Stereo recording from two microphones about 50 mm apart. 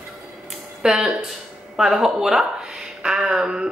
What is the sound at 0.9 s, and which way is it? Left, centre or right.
A woman's voice, centre.